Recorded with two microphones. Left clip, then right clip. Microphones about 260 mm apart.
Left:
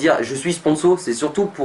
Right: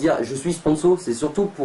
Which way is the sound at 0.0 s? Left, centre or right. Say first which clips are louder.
Left 3 dB; centre.